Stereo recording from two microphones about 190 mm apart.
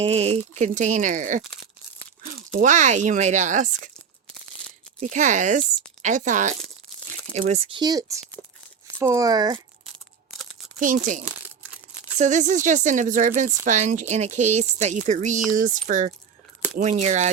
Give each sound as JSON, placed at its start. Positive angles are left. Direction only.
{"t": 0.0, "sound": "a woman's voice", "side_deg": -35}
{"t": 2.6, "sound": "a woman's voice", "side_deg": -40}
{"t": 4.9, "sound": "a woman's voice", "side_deg": -40}
{"t": 10.8, "sound": "a woman's voice", "side_deg": -45}